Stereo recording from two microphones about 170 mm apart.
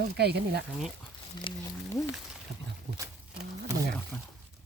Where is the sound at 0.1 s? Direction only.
75° right (ahead or behind).